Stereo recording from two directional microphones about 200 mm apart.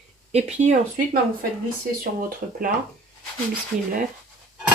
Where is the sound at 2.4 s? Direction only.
40° right (ahead or behind).